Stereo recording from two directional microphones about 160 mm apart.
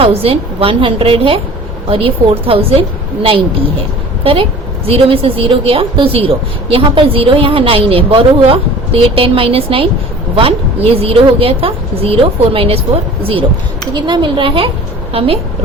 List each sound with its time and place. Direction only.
0.0 s a woman's voice: 35° right (ahead or behind)
4.2 s a woman's voice: 35° right (ahead or behind)
11.0 s a woman's voice: 35° right (ahead or behind)